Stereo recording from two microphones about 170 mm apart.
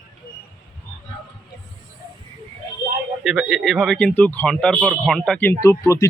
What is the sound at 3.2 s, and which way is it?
Speech, centre (ahead or behind).